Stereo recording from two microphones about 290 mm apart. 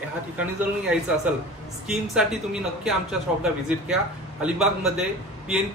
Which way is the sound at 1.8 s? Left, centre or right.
Centre.